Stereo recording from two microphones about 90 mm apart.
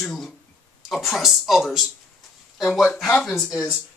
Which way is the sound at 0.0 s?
Centre (ahead or behind).